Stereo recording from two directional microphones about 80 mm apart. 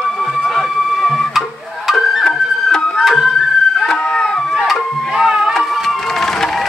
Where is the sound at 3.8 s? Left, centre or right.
Centre.